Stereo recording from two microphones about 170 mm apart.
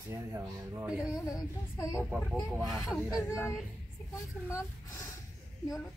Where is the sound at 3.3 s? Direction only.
15° left (ahead or behind).